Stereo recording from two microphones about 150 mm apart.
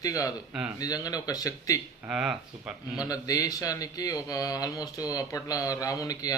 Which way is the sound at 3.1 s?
25° left (ahead or behind).